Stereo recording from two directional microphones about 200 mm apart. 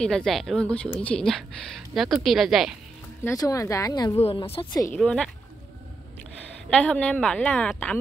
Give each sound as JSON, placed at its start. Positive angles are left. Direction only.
{"t": 0.0, "sound": "speech", "side_deg": 0}
{"t": 3.3, "sound": "a woman's voice", "side_deg": 15}
{"t": 4.9, "sound": "speech", "side_deg": 5}
{"t": 6.7, "sound": "a woman's voice", "side_deg": 5}